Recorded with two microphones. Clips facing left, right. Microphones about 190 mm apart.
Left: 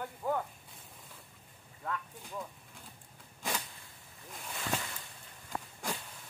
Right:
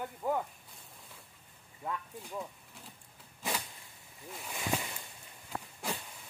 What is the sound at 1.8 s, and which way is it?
Speech, 15° right (ahead or behind).